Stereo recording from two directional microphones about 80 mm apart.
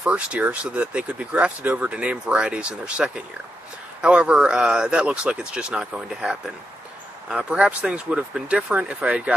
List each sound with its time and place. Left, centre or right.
0.0 s speech: centre